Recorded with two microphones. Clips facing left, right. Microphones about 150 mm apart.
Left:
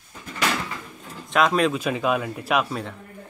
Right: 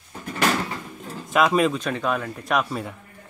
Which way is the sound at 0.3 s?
45° right (ahead or behind).